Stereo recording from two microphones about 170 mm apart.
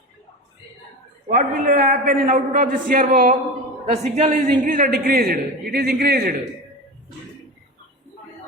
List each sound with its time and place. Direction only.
1.3 s a man's voice: 55° right (ahead or behind)